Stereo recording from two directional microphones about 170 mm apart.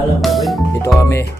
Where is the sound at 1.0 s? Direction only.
15° left (ahead or behind).